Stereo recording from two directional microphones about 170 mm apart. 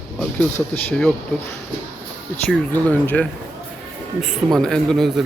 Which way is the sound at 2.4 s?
10° left (ahead or behind).